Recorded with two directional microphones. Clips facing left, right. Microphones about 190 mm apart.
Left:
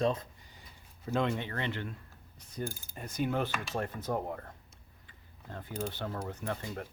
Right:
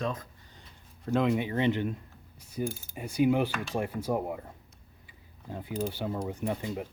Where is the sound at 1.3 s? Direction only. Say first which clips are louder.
Right 9 dB; 15° right (ahead or behind).